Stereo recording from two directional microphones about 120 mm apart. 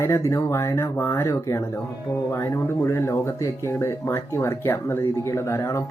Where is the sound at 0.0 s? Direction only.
25° left (ahead or behind).